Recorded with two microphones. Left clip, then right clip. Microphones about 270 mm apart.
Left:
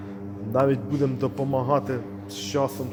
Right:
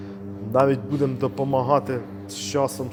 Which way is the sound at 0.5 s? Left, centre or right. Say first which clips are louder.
Right 3 dB; centre.